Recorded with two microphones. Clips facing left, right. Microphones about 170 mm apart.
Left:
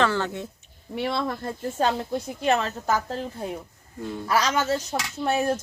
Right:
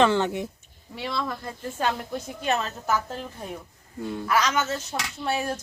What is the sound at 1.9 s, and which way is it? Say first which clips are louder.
Speech: left 3 dB; 30° left (ahead or behind).